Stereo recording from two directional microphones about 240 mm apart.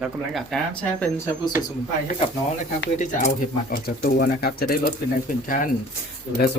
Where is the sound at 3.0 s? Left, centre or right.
Left.